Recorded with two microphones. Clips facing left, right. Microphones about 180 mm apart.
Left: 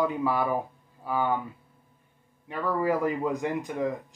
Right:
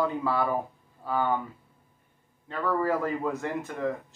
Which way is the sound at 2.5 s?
10° left (ahead or behind).